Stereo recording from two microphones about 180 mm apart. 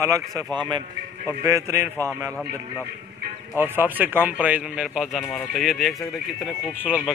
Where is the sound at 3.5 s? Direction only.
10° right (ahead or behind).